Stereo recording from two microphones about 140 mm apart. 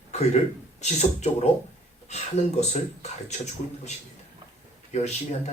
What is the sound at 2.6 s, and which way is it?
Speech, 55° left (ahead or behind).